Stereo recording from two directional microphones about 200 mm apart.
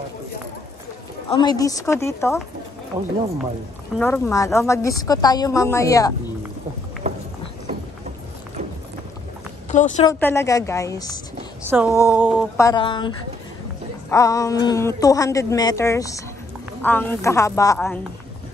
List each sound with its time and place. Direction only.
1.3 s a woman's voice: 20° left (ahead or behind)
2.9 s speech: 20° right (ahead or behind)
4.0 s a woman's voice: 15° left (ahead or behind)
9.7 s a woman's voice: 35° left (ahead or behind)
10.0 s a woman's voice: 15° left (ahead or behind)
11.7 s speech: 10° right (ahead or behind)
12.5 s speech: 20° left (ahead or behind)
14.1 s a woman's voice: 15° left (ahead or behind)